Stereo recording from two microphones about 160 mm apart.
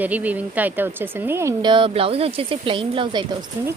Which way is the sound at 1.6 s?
30° right (ahead or behind).